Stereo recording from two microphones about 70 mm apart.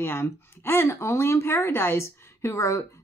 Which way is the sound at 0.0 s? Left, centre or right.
Left.